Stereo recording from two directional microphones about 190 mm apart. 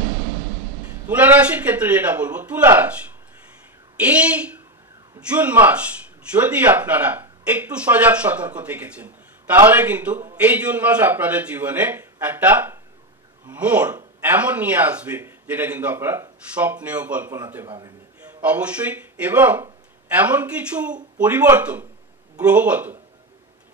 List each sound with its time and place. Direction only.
1.0 s speech: 10° right (ahead or behind)
4.0 s speech: 5° right (ahead or behind)